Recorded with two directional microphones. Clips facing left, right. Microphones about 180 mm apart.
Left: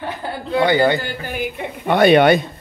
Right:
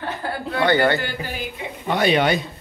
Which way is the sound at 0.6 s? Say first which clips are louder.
Left 3 dB; 15° left (ahead or behind).